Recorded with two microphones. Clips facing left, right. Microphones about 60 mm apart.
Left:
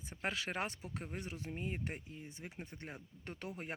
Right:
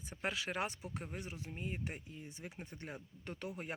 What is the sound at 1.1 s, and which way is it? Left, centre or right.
Speech, left.